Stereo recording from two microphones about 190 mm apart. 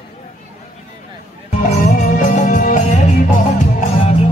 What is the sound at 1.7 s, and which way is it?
Music, 45° left (ahead or behind).